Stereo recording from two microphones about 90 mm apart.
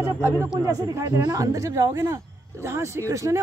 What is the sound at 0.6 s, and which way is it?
Speech, 40° right (ahead or behind).